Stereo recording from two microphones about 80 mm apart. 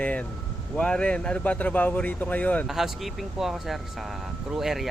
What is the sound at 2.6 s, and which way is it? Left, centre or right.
Speech, centre.